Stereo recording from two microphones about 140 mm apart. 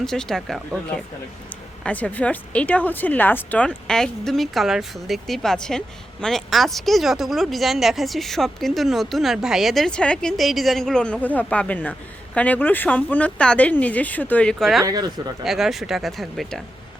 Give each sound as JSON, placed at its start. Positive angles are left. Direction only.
{"t": 0.0, "sound": "a woman's voice", "side_deg": 5}
{"t": 1.8, "sound": "a woman's voice", "side_deg": 10}
{"t": 14.8, "sound": "speech", "side_deg": -30}
{"t": 15.4, "sound": "a woman's voice", "side_deg": 0}